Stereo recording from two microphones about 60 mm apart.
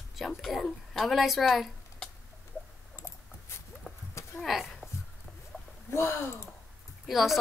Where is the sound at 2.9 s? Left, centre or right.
Left.